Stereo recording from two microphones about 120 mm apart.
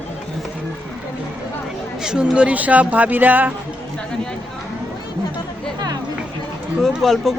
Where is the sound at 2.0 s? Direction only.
5° right (ahead or behind).